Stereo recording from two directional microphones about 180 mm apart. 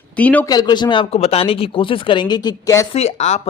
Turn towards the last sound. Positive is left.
turn(degrees=40)  # may be behind; listen again after turning